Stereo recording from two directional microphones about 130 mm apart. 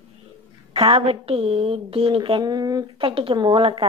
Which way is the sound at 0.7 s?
50° right (ahead or behind).